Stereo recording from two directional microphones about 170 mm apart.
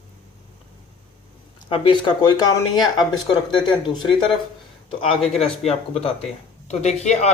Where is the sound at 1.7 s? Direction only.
30° left (ahead or behind).